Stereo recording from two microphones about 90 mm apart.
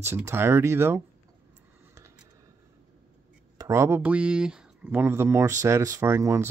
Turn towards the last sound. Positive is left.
turn(degrees=-30)  # may be behind; listen again after turning